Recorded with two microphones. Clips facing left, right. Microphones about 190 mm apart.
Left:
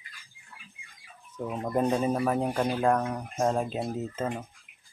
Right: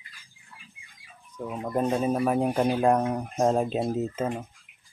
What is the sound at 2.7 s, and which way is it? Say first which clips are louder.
Speech: right 3 dB; 20° right (ahead or behind).